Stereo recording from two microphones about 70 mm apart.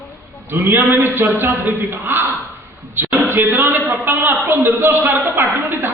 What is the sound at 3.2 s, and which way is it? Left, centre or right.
A man's voice, right.